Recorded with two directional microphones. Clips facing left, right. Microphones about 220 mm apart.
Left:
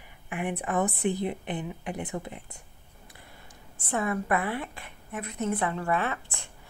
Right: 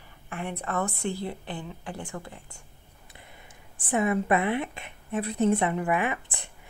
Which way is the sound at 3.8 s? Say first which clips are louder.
Right 4 dB; 20° right (ahead or behind).